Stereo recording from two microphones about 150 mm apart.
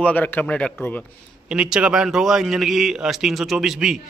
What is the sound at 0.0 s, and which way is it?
A man's voice, 10° left (ahead or behind).